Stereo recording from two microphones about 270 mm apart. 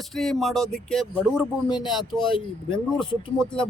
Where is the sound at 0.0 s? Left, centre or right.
Centre.